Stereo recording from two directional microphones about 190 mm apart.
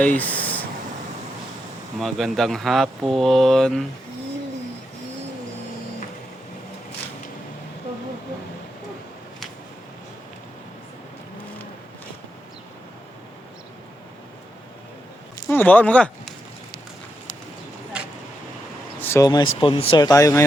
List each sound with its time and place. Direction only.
0.0 s a sound: 10° left (ahead or behind)
2.0 s speech: centre (ahead or behind)
15.4 s speech: 10° left (ahead or behind)
18.9 s speech: 15° left (ahead or behind)